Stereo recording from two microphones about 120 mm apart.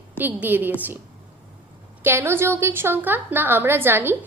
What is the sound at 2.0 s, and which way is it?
A woman's voice, 20° right (ahead or behind).